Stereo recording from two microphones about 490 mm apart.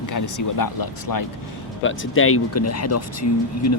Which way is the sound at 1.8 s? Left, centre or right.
Left.